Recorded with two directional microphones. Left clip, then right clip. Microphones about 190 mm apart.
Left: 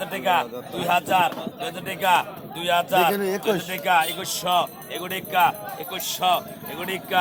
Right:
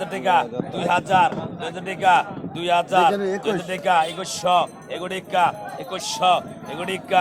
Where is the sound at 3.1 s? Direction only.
45° left (ahead or behind).